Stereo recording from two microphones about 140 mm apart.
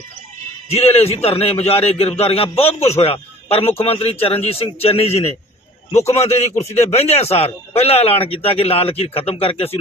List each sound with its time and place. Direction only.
0.7 s a man's voice: 45° left (ahead or behind)